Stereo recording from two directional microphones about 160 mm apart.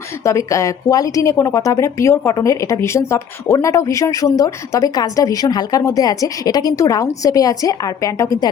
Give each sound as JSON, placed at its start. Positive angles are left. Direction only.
{"t": 0.3, "sound": "speech", "side_deg": 20}